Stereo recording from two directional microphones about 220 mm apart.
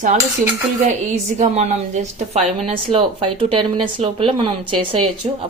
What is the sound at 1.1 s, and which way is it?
A woman's voice, 30° right (ahead or behind).